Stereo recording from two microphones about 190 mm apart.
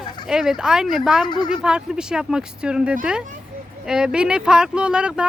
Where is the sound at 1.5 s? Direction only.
5° right (ahead or behind).